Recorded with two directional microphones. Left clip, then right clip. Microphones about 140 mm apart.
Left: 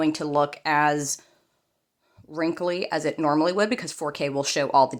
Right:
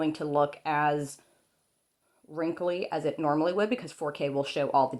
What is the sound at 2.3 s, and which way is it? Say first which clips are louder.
Speech: left 4 dB; 35° left (ahead or behind).